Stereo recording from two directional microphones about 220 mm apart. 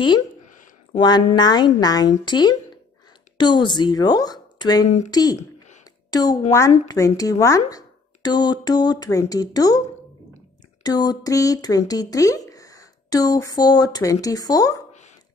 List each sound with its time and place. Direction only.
0.9 s speech: 20° left (ahead or behind)
4.8 s speech: 30° left (ahead or behind)
5.1 s speech: 15° left (ahead or behind)
6.0 s a sound: 15° left (ahead or behind)
6.9 s speech: 15° left (ahead or behind)